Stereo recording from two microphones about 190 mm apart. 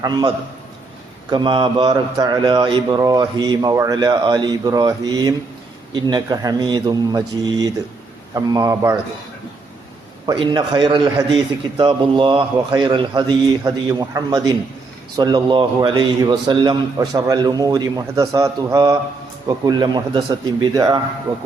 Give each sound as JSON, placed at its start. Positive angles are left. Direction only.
{"t": 0.0, "sound": "a man's voice", "side_deg": -20}
{"t": 10.2, "sound": "a man's voice", "side_deg": -25}